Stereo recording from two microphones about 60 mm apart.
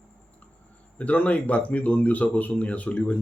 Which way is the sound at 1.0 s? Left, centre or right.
Left.